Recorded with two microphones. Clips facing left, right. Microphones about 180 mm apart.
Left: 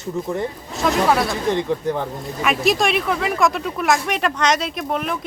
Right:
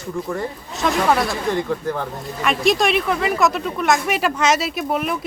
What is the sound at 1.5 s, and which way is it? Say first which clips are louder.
Speech: left 1 dB; 20° left (ahead or behind).